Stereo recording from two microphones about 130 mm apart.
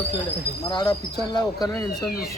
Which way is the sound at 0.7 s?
35° left (ahead or behind).